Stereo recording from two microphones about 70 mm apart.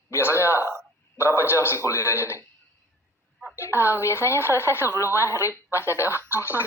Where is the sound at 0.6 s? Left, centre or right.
Right.